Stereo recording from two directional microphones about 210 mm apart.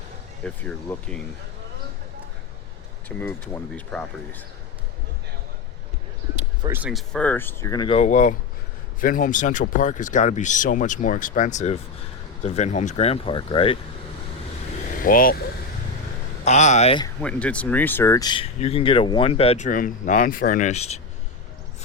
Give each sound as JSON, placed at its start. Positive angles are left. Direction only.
{"t": 0.4, "sound": "speech", "side_deg": 5}
{"t": 3.2, "sound": "speech", "side_deg": 10}
{"t": 6.6, "sound": "speech", "side_deg": -10}
{"t": 15.0, "sound": "speech", "side_deg": 40}
{"t": 16.4, "sound": "speech", "side_deg": 35}
{"t": 17.2, "sound": "speech", "side_deg": 5}